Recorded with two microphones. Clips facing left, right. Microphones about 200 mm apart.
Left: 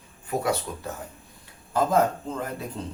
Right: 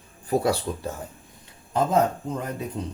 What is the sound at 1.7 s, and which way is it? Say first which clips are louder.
Speech: even; 20° right (ahead or behind).